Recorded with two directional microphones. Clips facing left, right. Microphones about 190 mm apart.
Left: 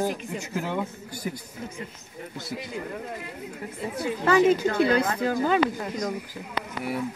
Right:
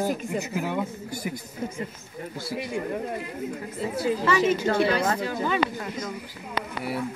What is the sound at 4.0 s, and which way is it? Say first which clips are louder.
Speech: left 3 dB; 35° right (ahead or behind).